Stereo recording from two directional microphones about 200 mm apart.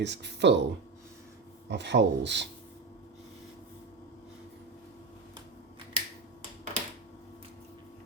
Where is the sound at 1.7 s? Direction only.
60° right (ahead or behind).